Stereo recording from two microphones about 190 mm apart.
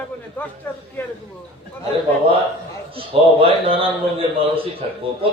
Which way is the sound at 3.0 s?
30° right (ahead or behind).